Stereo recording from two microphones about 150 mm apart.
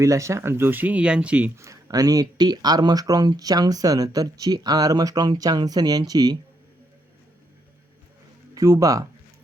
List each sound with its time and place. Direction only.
0.0 s speech: 20° right (ahead or behind)
1.5 s speech: 20° right (ahead or behind)
8.5 s speech: 20° right (ahead or behind)